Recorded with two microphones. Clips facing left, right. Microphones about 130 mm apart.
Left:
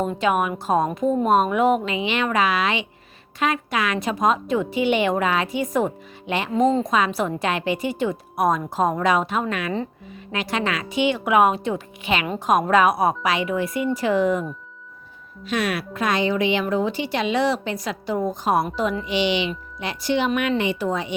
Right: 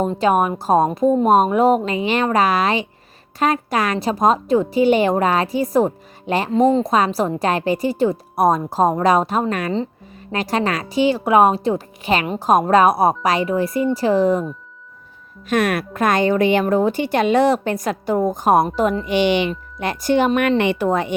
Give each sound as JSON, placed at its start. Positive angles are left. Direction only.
{"t": 0.1, "sound": "a woman's voice", "side_deg": -35}
{"t": 15.4, "sound": "speech", "side_deg": -50}
{"t": 20.6, "sound": "speech", "side_deg": -60}